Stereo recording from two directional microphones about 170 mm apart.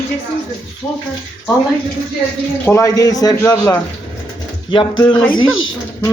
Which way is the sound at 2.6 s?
15° left (ahead or behind).